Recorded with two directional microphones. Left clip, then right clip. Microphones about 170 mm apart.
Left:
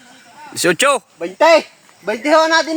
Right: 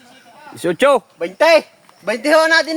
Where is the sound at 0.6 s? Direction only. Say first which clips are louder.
Even; 10° left (ahead or behind).